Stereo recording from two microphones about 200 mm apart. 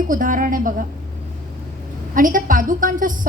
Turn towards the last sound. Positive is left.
turn(degrees=-40)  # may be behind; listen again after turning